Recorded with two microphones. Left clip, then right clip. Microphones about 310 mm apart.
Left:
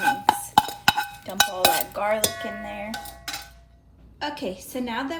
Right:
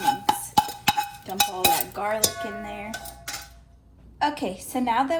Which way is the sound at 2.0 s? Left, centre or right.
Left.